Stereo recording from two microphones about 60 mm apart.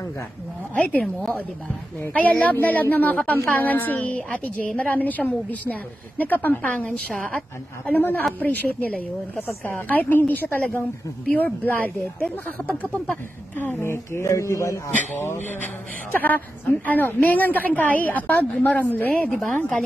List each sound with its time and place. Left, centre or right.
0.7 s a woman's voice: left
2.1 s a woman's voice: left
9.7 s a woman's voice: left
13.8 s speech: left
15.6 s a woman's voice: left
19.3 s speech: centre